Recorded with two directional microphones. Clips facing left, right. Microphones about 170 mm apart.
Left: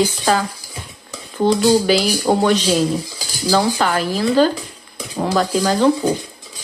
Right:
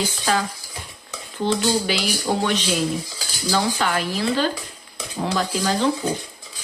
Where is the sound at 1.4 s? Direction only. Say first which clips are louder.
Left 7 dB; 40° left (ahead or behind).